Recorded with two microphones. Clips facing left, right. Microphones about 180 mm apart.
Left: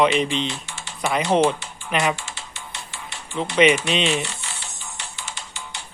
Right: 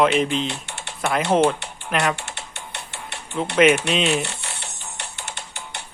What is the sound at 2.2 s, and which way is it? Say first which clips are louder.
Typing: right 2 dB; 65° right (ahead or behind).